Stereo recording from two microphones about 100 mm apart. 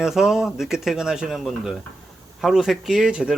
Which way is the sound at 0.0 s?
5° right (ahead or behind).